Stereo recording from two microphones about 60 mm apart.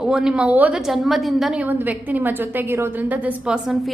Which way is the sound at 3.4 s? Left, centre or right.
Centre.